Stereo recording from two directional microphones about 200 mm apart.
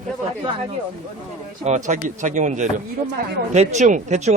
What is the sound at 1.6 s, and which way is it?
Speech, 35° right (ahead or behind).